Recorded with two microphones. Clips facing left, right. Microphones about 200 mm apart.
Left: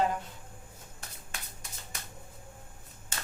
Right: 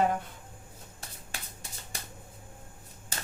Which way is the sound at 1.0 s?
35° right (ahead or behind).